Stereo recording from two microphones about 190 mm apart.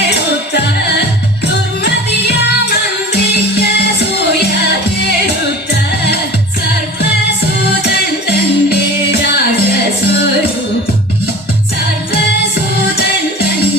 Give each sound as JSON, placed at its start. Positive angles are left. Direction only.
{"t": 0.1, "sound": "music", "side_deg": 60}
{"t": 7.6, "sound": "music", "side_deg": 60}